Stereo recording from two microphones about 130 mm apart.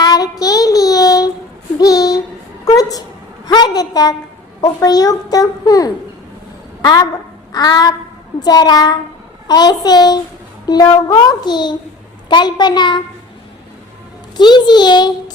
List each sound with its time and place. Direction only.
0.0 s child singing: 30° left (ahead or behind)
1.8 s a sound: 30° left (ahead or behind)
4.6 s a child's voice: 30° left (ahead or behind)
14.3 s a child's voice: 35° left (ahead or behind)